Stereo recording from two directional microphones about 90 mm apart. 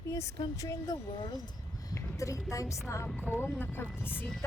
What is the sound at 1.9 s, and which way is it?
Speech, 35° left (ahead or behind).